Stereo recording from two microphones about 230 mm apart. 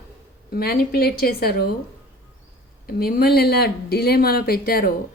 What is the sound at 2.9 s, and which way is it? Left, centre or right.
Speech, left.